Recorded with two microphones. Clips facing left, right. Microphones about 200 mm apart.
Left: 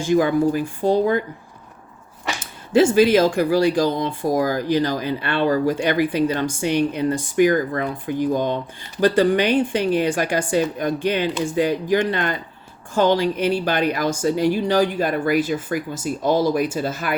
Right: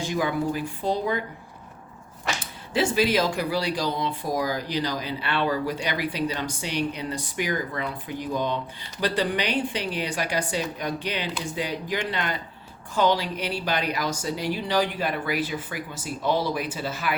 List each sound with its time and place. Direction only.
0.0 s speech: 50° left (ahead or behind)
2.7 s speech: 45° left (ahead or behind)